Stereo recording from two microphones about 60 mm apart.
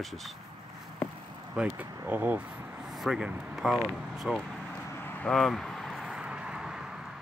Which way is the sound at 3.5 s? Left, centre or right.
Centre.